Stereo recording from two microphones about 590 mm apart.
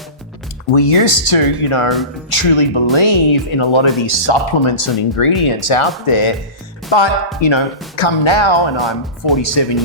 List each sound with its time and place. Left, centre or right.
0.7 s speech: left
8.8 s speech: centre
9.4 s speech: left